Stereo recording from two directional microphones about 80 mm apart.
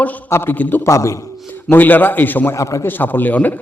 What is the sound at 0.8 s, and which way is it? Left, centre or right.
Speech, left.